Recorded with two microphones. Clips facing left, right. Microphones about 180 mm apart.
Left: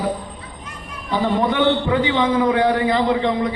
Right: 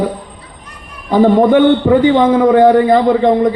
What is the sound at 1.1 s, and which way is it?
A man's voice, 50° right (ahead or behind).